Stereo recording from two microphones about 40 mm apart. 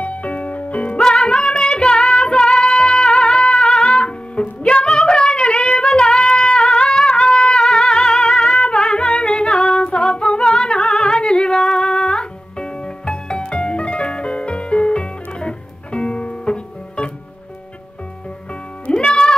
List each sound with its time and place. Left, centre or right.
0.0 s music: left
1.0 s music: left
18.5 s music: left